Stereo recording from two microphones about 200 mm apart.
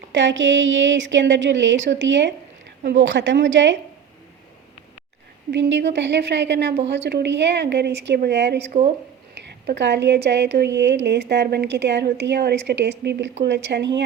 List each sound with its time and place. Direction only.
0.1 s a woman's voice: 65° right (ahead or behind)
5.5 s a woman's voice: 60° right (ahead or behind)